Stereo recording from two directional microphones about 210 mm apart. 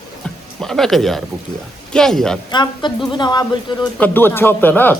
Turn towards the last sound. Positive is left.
turn(degrees=10)  # may be behind; listen again after turning